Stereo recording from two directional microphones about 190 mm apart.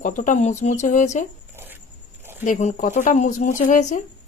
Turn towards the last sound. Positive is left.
turn(degrees=40)  # may be behind; listen again after turning